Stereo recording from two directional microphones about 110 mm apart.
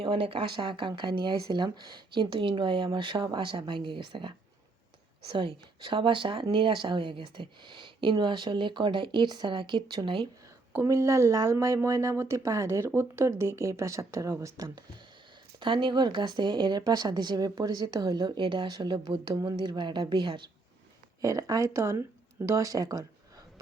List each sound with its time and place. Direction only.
0.0 s speech: 55° right (ahead or behind)
10.8 s speech: 30° right (ahead or behind)
15.6 s speech: 45° right (ahead or behind)
21.2 s speech: 30° right (ahead or behind)